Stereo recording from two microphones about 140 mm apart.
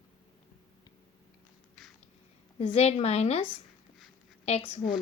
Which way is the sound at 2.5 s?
45° left (ahead or behind).